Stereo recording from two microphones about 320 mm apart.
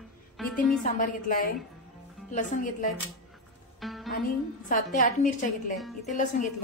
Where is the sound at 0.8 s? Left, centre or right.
Left.